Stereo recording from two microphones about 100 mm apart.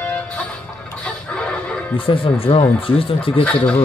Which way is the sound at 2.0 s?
65° left (ahead or behind).